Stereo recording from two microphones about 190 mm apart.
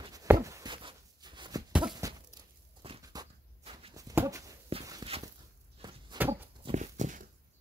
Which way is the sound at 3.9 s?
15° right (ahead or behind).